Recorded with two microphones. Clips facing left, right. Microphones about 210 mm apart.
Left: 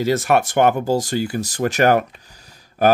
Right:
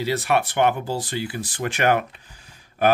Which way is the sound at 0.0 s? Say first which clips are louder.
Left 5 dB; 45° left (ahead or behind).